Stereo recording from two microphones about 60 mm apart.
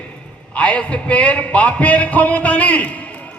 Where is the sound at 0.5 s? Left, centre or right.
Left.